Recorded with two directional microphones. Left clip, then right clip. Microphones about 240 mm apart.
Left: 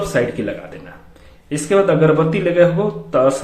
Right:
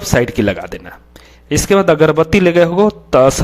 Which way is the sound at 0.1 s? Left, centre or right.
Right.